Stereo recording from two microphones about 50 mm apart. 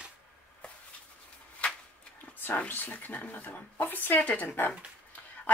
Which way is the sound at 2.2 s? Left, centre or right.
Left.